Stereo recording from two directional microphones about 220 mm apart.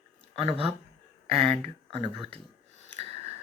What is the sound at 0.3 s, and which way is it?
Speech, 25° right (ahead or behind).